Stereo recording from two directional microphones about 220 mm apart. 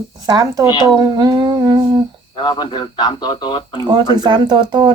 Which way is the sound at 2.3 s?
20° left (ahead or behind).